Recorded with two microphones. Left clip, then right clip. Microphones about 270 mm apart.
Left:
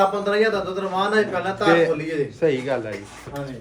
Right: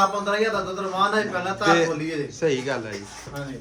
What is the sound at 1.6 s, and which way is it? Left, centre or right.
Music, centre.